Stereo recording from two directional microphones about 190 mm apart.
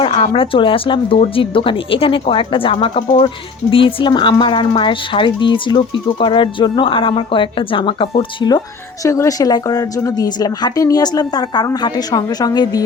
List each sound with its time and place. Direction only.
0.0 s speech: 30° left (ahead or behind)